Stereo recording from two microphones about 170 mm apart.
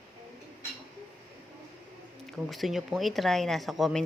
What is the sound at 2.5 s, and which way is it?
Speech, centre (ahead or behind).